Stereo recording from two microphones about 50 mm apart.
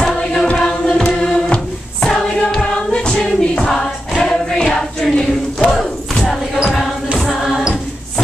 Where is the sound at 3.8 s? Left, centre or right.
Centre.